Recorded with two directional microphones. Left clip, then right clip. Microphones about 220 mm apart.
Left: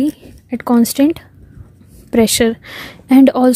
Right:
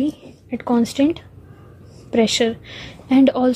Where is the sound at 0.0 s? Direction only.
30° left (ahead or behind).